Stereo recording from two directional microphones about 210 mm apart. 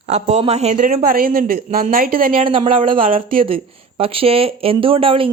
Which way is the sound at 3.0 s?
40° right (ahead or behind).